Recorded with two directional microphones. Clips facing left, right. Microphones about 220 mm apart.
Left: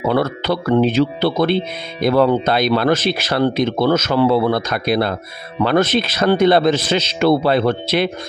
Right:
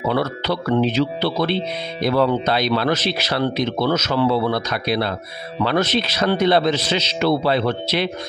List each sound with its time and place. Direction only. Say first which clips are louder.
0.1 s speech: left 4 dB; 50° left (ahead or behind)